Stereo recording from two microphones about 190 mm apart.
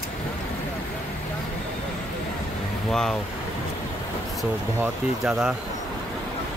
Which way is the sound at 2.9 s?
Centre (ahead or behind).